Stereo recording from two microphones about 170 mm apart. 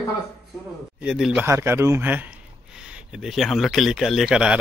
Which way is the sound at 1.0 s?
5° right (ahead or behind).